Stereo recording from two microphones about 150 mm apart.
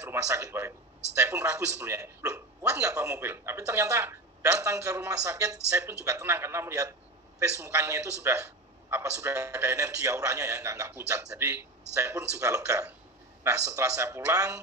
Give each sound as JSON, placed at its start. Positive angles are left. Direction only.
{"t": 0.0, "sound": "a man's voice", "side_deg": -20}